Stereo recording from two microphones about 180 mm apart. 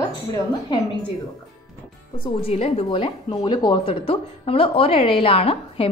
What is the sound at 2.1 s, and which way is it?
Speech, 30° left (ahead or behind).